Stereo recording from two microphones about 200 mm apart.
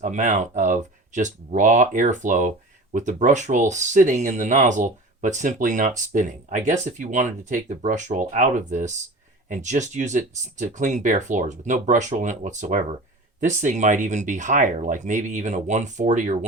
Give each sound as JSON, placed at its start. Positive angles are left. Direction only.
{"t": 0.0, "sound": "speech", "side_deg": -40}